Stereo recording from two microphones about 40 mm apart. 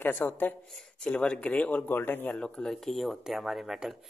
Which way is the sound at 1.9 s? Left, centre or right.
Left.